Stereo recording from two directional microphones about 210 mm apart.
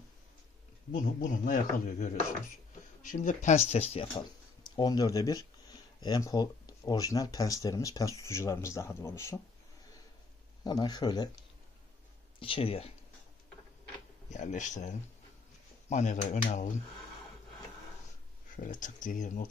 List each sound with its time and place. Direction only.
0.9 s speech: 40° left (ahead or behind); by 9.4 s 15° left (ahead or behind)
10.6 s a man's voice: 20° left (ahead or behind)
12.4 s a man's voice: 25° left (ahead or behind)
14.3 s speech: 35° left (ahead or behind)
18.6 s speech: 40° left (ahead or behind)